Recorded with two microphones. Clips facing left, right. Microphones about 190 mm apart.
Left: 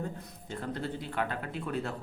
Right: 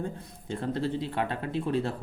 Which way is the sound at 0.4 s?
30° right (ahead or behind).